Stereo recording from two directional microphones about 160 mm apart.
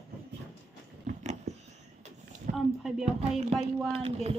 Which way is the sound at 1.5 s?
90° right.